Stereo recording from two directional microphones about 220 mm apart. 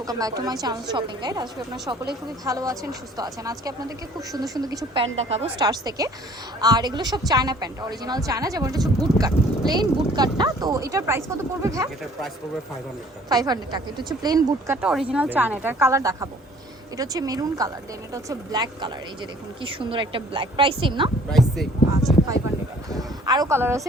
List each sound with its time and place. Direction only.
0.0 s speech: 15° right (ahead or behind)
5.1 s a woman's voice: 30° right (ahead or behind)
5.6 s speech: 15° right (ahead or behind)
13.2 s speech: 15° right (ahead or behind)
14.8 s a woman's voice: 5° right (ahead or behind); by 21.1 s 20° right (ahead or behind)
21.2 s speech: centre (ahead or behind)
23.0 s speech: 15° right (ahead or behind)